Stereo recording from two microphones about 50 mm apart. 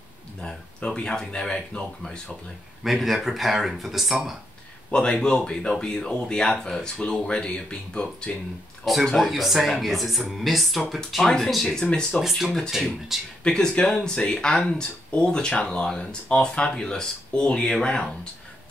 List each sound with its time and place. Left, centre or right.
0.4 s a sound: left
1.0 s speech: centre
2.8 s speech: centre
4.9 s speech: centre
9.0 s speech: centre
11.2 s speech: centre
12.2 s speech: centre
13.4 s speech: centre